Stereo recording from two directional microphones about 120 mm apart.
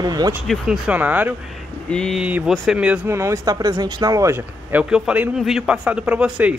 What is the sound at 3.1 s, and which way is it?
Speech, 25° right (ahead or behind).